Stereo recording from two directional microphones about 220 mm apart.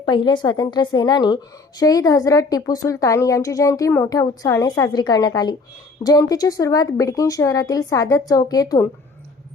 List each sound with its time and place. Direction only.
0.0 s a woman's voice: 20° left (ahead or behind)